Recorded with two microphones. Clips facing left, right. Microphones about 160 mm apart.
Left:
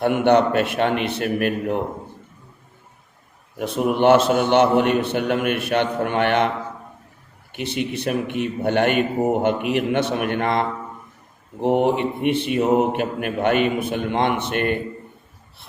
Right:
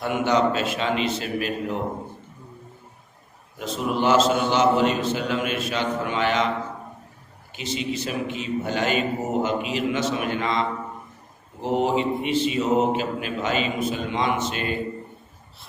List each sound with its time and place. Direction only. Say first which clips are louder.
0.0 s a man's voice: left 5 dB; 60° left (ahead or behind)
3.6 s a man's voice: left 6 dB; 60° left (ahead or behind)
7.5 s a man's voice: left 3 dB; 60° left (ahead or behind)